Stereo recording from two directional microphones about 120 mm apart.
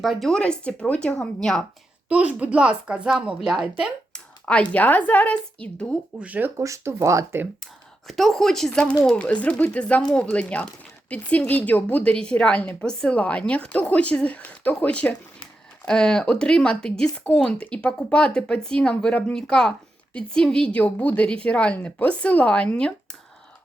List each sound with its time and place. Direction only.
0.0 s a woman's voice: centre (ahead or behind)
2.0 s a woman's voice: 10° right (ahead or behind)
4.1 s a sound: 10° left (ahead or behind)
4.7 s a woman's voice: 15° left (ahead or behind)
6.1 s a woman's voice: 10° right (ahead or behind)
6.6 s speech: 25° right (ahead or behind)
7.6 s a woman's voice: centre (ahead or behind)